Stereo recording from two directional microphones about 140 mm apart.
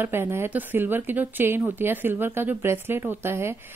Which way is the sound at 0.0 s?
15° right (ahead or behind).